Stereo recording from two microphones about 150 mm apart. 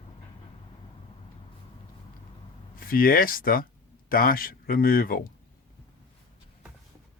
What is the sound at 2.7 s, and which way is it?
Speech, 75° left (ahead or behind).